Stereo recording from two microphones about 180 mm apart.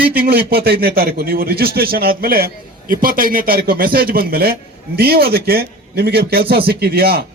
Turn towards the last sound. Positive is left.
turn(degrees=-60)  # may be behind; listen again after turning